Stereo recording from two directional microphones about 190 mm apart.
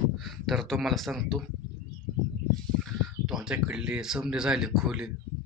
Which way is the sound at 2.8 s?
5° right (ahead or behind).